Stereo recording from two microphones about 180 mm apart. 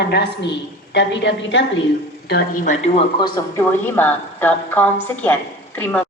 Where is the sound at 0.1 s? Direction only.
75° left (ahead or behind); by 1.6 s 90° left.